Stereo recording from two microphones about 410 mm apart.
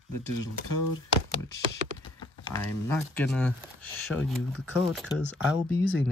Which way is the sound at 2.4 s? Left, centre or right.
Centre.